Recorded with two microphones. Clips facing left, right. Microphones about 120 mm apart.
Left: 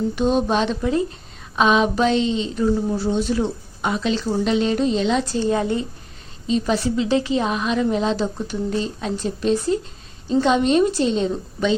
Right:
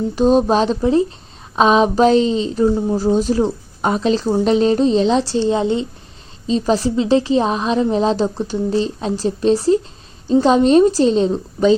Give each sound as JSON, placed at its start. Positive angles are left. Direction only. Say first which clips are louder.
{"t": 0.2, "sound": "a woman's voice", "louder": "right 7 dB", "side_deg": -35}
{"t": 6.5, "sound": "a woman's voice", "louder": "right 4 dB", "side_deg": -35}